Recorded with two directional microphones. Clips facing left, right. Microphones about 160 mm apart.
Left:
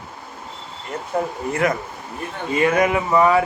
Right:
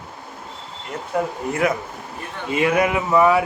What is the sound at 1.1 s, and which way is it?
Speech, centre (ahead or behind).